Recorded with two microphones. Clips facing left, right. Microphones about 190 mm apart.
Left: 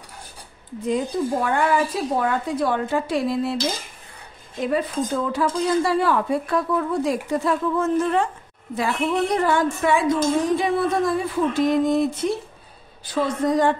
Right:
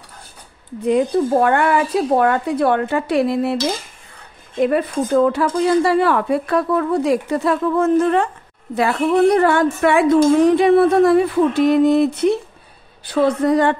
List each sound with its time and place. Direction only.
0.8 s speech: 60° right (ahead or behind)
4.6 s a woman's voice: 60° right (ahead or behind)